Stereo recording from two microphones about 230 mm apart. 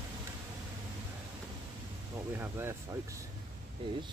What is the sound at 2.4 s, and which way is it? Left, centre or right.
Speech, centre.